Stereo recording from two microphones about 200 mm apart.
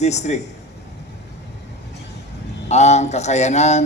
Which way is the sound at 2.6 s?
35° left (ahead or behind).